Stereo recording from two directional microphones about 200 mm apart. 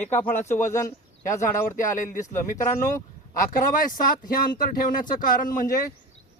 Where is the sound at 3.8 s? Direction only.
45° left (ahead or behind).